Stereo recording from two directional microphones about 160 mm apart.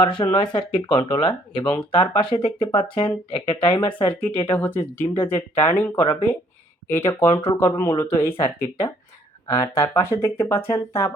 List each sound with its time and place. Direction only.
0.0 s speech: 30° left (ahead or behind)
4.1 s speech: 10° left (ahead or behind)